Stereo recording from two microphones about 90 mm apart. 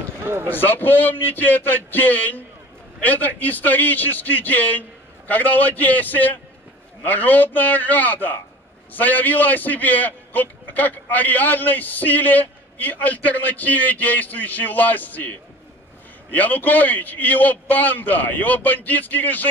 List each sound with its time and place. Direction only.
0.2 s speech: 30° right (ahead or behind)
0.5 s a man's voice: 20° left (ahead or behind)